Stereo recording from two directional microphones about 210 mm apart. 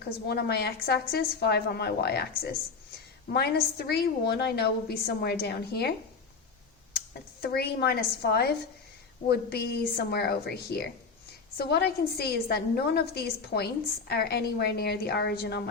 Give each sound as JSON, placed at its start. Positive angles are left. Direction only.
{"t": 0.3, "sound": "a woman's voice", "side_deg": 50}
{"t": 7.1, "sound": "a woman's voice", "side_deg": 50}